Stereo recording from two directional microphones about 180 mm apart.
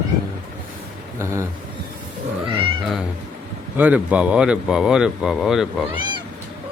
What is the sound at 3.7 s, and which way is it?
Speech, 10° right (ahead or behind).